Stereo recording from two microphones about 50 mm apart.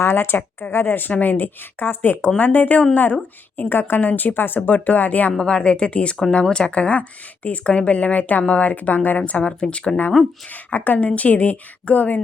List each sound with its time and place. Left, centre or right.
0.0 s speech: left
3.6 s speech: left
5.4 s a woman's voice: centre
10.5 s speech: left